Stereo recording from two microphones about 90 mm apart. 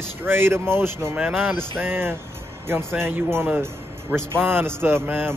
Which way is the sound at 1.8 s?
25° right (ahead or behind).